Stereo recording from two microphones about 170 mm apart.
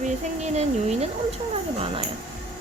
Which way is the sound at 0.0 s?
45° right (ahead or behind).